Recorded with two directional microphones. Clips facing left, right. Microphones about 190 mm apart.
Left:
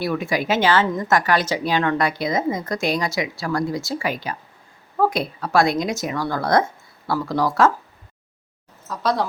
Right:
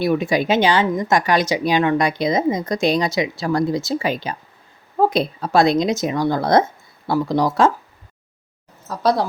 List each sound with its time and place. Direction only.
0.0 s a woman's voice: 20° right (ahead or behind)
8.9 s a woman's voice: 35° right (ahead or behind)